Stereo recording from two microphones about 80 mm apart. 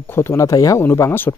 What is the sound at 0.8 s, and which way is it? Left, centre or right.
Speech, left.